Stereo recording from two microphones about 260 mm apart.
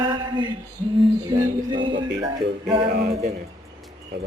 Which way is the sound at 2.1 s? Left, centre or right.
Centre.